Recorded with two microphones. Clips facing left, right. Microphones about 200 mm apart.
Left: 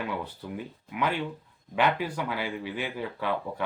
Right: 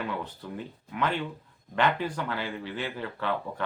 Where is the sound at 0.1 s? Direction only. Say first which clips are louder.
Left 1 dB; 10° left (ahead or behind).